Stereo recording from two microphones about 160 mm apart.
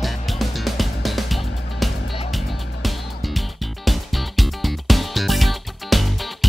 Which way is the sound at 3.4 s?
Centre (ahead or behind).